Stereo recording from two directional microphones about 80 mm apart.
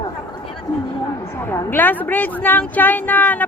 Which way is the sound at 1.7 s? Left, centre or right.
Left.